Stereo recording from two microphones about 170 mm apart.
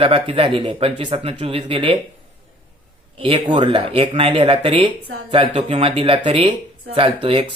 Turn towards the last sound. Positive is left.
turn(degrees=-30)  # may be behind; listen again after turning